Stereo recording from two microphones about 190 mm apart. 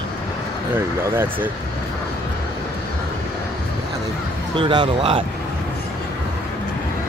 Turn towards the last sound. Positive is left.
turn(degrees=-25)  # may be behind; listen again after turning